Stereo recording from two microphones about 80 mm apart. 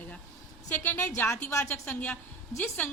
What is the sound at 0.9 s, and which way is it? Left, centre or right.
A woman's voice, left.